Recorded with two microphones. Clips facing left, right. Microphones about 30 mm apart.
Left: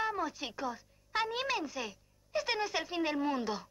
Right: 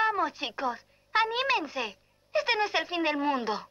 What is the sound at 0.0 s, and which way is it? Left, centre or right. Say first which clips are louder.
Speech: right 7 dB; right.